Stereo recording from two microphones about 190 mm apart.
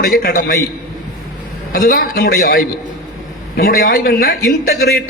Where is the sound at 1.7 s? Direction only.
45° left (ahead or behind).